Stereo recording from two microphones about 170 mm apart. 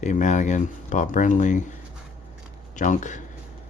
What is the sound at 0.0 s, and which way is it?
Speech, 45° left (ahead or behind).